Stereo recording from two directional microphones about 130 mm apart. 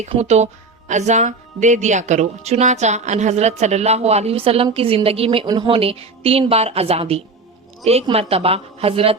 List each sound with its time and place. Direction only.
0.2 s a woman's voice: 55° right (ahead or behind)